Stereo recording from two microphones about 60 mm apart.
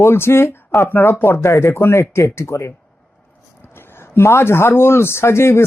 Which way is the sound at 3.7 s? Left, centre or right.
Left.